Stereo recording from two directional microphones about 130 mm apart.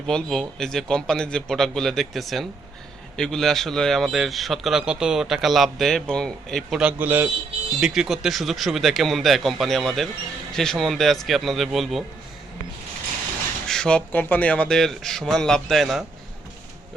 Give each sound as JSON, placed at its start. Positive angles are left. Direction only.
{"t": 0.1, "sound": "speech", "side_deg": 5}
{"t": 13.7, "sound": "speech", "side_deg": 5}